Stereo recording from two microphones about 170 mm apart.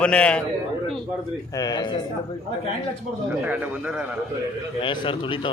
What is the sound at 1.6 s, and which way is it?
Speech, 25° left (ahead or behind).